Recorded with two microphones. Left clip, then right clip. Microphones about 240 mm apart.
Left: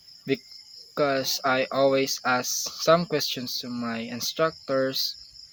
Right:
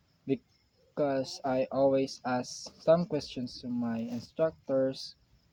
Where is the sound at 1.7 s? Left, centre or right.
Left.